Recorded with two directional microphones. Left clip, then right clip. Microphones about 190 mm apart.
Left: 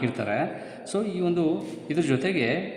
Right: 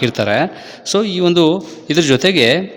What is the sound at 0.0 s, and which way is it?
A man's voice, 50° right (ahead or behind).